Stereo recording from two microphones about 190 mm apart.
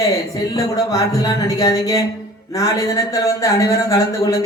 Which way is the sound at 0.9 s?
15° left (ahead or behind).